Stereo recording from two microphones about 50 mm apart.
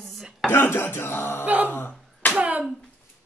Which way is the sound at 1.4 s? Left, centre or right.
Right.